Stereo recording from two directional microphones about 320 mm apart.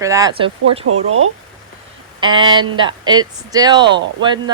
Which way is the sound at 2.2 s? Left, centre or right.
Centre.